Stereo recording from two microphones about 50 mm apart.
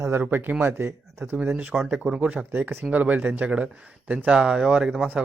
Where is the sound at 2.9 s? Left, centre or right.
Right.